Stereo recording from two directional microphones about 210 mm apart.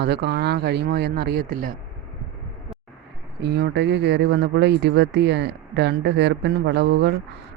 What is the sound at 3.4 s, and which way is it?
Speech, 55° right (ahead or behind).